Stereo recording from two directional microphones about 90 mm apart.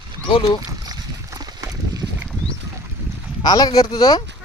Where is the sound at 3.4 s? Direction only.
45° left (ahead or behind).